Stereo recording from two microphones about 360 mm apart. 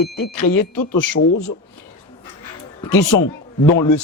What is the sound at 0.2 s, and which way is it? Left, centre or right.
Speech, left.